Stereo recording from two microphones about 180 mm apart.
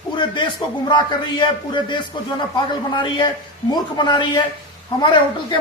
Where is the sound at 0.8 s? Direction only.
25° left (ahead or behind).